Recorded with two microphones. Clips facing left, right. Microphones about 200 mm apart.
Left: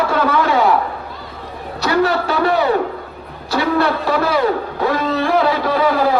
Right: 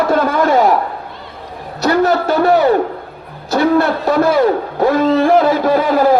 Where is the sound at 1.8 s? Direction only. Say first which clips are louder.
Right 3 dB; 45° right (ahead or behind).